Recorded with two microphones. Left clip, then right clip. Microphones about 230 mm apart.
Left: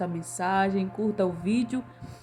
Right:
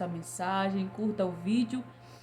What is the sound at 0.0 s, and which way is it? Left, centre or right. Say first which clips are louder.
A woman's voice: left 5 dB; left.